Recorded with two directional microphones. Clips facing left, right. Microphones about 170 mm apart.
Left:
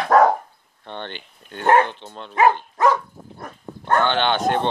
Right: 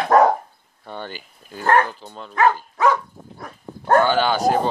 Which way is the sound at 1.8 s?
5° right (ahead or behind).